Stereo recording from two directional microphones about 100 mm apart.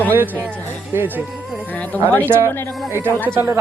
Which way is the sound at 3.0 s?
20° right (ahead or behind).